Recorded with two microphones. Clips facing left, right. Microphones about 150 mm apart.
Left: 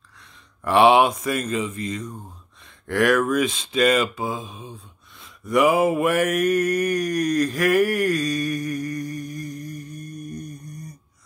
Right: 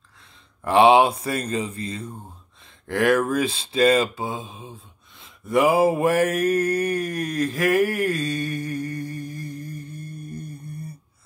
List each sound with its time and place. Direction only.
0.7 s speech: 30° right (ahead or behind)
2.9 s mantra: 25° right (ahead or behind)